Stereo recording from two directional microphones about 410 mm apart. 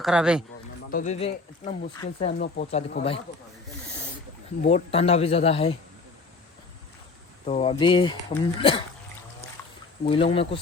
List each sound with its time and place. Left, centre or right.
0.0 s speech: centre
0.9 s speech: centre
4.6 s speech: centre
7.4 s speech: centre
10.1 s speech: centre